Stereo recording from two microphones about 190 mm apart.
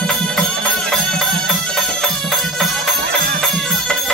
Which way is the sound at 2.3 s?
Centre (ahead or behind).